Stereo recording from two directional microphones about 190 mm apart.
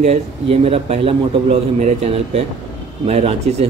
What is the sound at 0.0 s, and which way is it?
Speech, 35° right (ahead or behind).